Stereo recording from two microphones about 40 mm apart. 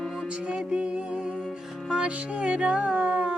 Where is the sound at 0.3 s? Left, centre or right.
Right.